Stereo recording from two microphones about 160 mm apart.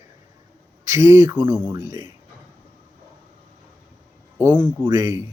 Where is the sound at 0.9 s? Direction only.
20° right (ahead or behind).